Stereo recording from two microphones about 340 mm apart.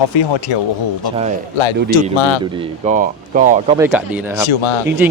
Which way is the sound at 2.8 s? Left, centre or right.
Right.